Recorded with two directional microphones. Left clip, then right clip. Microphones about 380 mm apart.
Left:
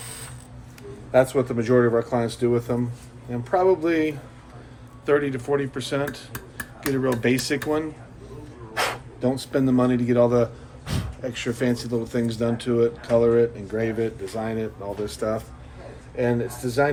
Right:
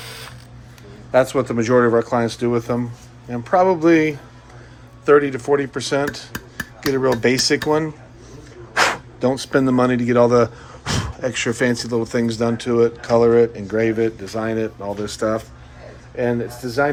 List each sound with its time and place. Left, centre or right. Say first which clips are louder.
1.1 s speech: right 3 dB; right